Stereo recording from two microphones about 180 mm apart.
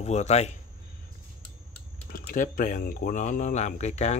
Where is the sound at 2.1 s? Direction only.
50° left (ahead or behind).